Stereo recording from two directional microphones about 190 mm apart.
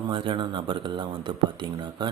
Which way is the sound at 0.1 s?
25° right (ahead or behind).